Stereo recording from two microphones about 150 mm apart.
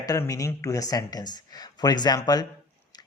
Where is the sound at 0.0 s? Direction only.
25° left (ahead or behind).